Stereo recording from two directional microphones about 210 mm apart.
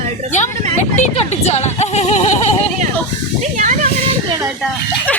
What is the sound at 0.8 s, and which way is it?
Speech, 35° left (ahead or behind).